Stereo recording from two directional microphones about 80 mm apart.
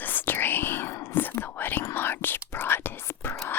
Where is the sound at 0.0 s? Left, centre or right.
Left.